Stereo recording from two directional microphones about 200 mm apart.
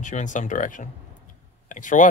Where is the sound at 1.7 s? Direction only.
40° left (ahead or behind).